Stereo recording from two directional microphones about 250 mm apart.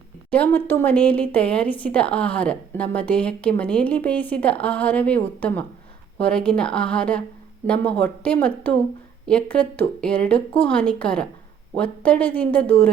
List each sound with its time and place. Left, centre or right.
0.3 s speech: centre